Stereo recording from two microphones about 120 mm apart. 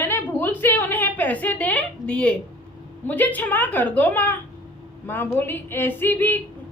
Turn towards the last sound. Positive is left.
turn(degrees=15)  # may be behind; listen again after turning